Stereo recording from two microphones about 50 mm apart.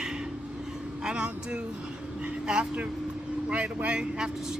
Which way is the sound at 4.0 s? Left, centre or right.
Centre.